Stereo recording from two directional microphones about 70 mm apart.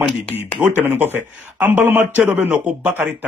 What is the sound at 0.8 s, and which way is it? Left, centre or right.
A man's voice, right.